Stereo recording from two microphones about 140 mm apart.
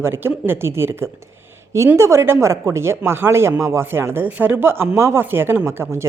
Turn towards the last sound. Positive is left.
turn(degrees=-20)  # may be behind; listen again after turning